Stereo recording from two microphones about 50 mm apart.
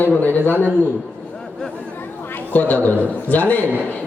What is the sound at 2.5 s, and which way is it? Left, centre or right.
A man's voice, left.